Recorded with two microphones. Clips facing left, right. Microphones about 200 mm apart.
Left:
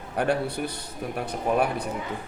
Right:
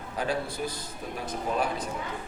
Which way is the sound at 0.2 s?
65° left (ahead or behind).